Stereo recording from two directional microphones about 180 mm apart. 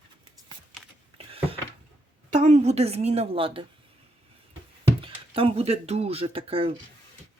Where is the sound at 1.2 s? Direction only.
30° right (ahead or behind).